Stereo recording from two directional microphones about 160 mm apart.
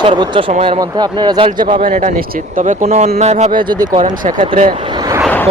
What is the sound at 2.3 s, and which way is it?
Speech, 55° right (ahead or behind).